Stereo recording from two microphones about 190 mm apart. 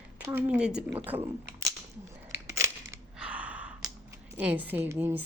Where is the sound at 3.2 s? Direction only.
5° right (ahead or behind).